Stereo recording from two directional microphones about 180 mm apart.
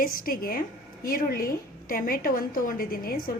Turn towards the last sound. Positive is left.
turn(degrees=55)  # may be behind; listen again after turning